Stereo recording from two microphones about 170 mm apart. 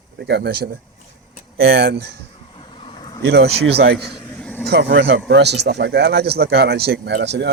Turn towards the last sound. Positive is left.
turn(degrees=-80)